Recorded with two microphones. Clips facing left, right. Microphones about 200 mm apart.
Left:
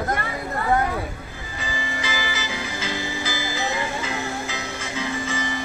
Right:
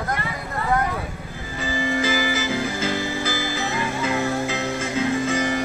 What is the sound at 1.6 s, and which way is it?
Music, 45° right (ahead or behind).